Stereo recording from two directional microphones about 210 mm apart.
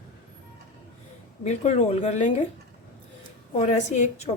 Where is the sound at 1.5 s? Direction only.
30° left (ahead or behind).